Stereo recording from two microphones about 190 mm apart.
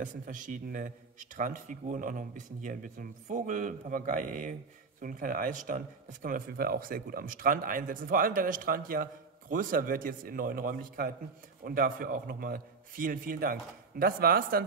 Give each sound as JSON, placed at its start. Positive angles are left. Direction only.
{"t": 0.0, "sound": "speech", "side_deg": -40}